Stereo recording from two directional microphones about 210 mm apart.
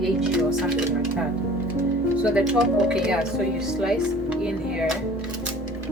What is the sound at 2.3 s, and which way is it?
Speech, 5° right (ahead or behind).